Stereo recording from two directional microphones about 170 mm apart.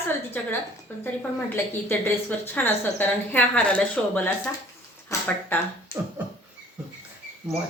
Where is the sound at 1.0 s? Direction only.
10° left (ahead or behind).